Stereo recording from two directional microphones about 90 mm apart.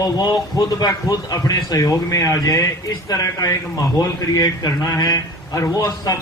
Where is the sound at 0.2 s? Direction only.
50° left (ahead or behind).